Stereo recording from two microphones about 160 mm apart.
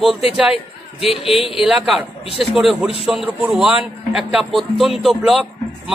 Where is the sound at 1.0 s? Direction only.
35° left (ahead or behind).